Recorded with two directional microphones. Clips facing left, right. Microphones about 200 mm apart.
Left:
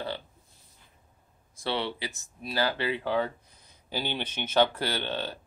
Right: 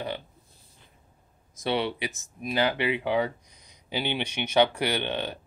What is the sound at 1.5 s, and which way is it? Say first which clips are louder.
Speech: right 4 dB; 20° right (ahead or behind).